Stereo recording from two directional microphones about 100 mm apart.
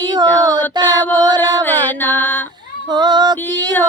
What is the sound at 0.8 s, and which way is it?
Female singing, 45° right (ahead or behind).